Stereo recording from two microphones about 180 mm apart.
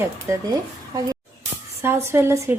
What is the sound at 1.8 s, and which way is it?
Speech, 15° right (ahead or behind).